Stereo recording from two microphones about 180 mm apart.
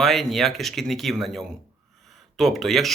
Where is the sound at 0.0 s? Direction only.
Centre (ahead or behind).